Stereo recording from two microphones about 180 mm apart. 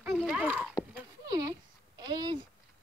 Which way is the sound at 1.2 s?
20° right (ahead or behind).